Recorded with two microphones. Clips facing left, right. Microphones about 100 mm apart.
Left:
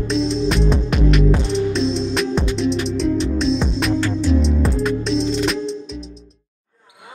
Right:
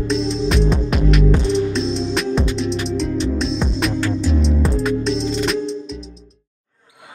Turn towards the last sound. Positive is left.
turn(degrees=0)  # may be behind; listen again after turning